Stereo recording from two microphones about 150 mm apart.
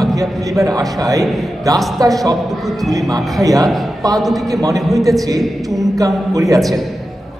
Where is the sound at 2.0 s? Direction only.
25° right (ahead or behind).